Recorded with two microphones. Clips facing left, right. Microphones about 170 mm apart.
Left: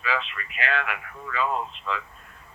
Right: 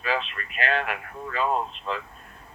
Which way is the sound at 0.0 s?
40° right (ahead or behind).